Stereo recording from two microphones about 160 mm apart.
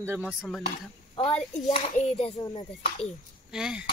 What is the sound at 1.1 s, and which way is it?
Speech, 30° left (ahead or behind).